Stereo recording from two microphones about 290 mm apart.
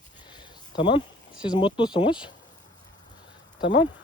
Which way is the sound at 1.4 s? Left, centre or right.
Centre.